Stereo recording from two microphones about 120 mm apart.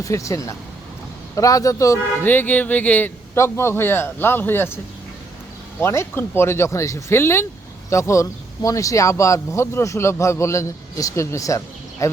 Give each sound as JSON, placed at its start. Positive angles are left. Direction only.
{"t": 0.0, "sound": "speech", "side_deg": 25}
{"t": 2.2, "sound": "music", "side_deg": 15}
{"t": 3.3, "sound": "speech", "side_deg": 25}
{"t": 5.8, "sound": "speech", "side_deg": 20}